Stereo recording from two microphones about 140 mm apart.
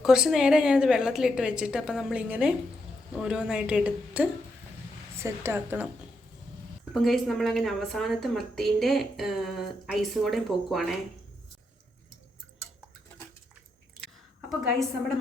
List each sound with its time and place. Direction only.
0.0 s a woman's voice: 5° right (ahead or behind)
6.9 s a woman's voice: centre (ahead or behind)
14.6 s a woman's voice: centre (ahead or behind)